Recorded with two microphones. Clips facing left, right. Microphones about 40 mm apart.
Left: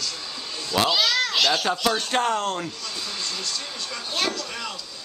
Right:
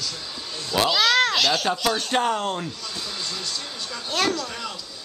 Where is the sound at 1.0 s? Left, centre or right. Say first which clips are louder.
Right 4 dB; right.